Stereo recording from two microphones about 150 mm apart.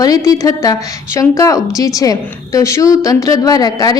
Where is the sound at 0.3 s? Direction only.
20° left (ahead or behind).